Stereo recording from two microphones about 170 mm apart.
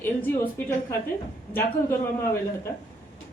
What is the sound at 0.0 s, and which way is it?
Speech, 15° left (ahead or behind).